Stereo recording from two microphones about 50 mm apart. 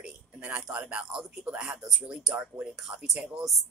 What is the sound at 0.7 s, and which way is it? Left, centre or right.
Speech, right.